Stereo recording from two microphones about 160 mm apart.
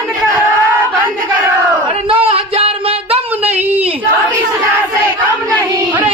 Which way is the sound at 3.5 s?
10° right (ahead or behind).